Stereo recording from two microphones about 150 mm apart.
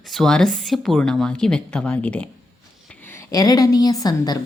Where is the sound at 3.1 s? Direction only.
20° left (ahead or behind).